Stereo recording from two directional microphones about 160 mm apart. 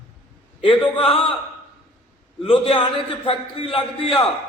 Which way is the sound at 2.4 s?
35° left (ahead or behind).